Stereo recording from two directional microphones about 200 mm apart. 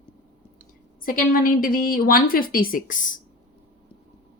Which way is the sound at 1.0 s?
45° left (ahead or behind).